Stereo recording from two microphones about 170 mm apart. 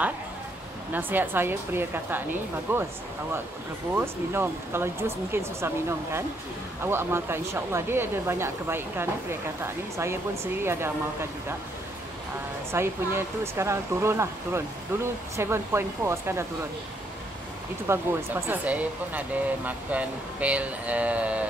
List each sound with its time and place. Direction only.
0.9 s speech: 10° right (ahead or behind)
3.9 s speech: 15° right (ahead or behind)
12.7 s speech: 15° right (ahead or behind)
17.8 s speech: 10° right (ahead or behind)